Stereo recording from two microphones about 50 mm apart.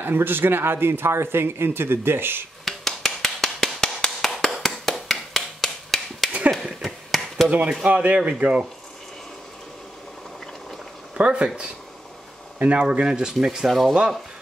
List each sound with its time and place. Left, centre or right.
0.0 s speech: right
2.6 s a sound: centre
7.4 s speech: right
11.1 s speech: right
13.0 s speech: centre
13.7 s speech: centre